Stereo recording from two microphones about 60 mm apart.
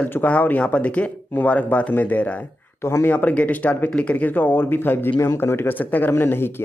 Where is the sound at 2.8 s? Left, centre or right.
Left.